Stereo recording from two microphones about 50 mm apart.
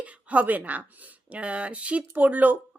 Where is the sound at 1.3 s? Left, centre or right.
Right.